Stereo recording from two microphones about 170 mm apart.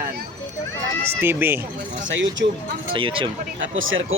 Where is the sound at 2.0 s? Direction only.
90° right.